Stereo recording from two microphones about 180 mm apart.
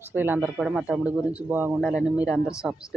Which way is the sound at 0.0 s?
10° right (ahead or behind).